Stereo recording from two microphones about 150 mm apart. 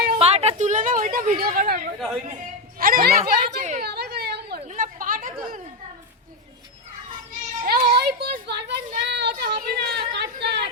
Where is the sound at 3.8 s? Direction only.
90° right; by 5.3 s 65° right (ahead or behind).